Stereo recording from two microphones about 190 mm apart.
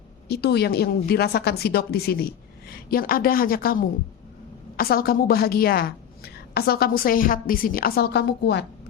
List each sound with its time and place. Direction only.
0.3 s a woman's voice: 60° left (ahead or behind)